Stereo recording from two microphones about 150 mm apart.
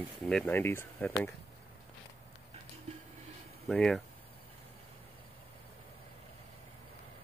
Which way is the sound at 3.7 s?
Centre (ahead or behind).